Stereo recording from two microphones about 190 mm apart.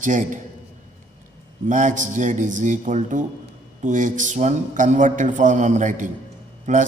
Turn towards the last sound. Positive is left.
turn(degrees=-40)  # may be behind; listen again after turning